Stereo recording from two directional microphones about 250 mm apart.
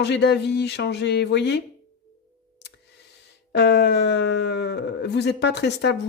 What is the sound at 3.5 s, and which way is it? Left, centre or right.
Speech, left.